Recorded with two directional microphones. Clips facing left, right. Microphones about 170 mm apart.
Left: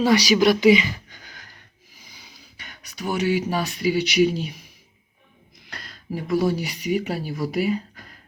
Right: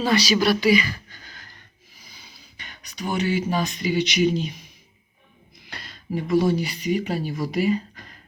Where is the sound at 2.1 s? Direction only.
15° left (ahead or behind).